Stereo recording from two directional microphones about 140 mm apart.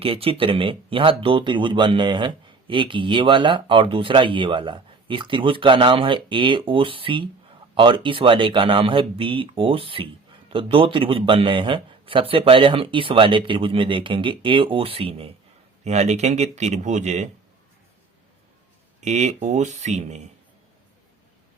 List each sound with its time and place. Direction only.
0.0 s speech: 40° right (ahead or behind)
15.8 s speech: 55° right (ahead or behind)
18.9 s speech: 55° right (ahead or behind)